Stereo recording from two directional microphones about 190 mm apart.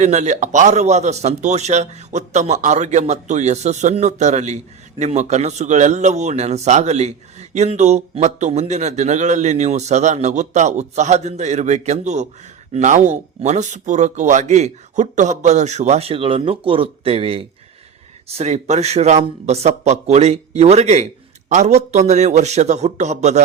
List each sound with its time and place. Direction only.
0.0 s a man's voice: 40° right (ahead or behind)